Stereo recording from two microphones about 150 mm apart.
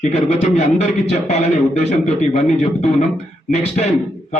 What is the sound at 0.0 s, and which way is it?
A man's voice, 45° left (ahead or behind).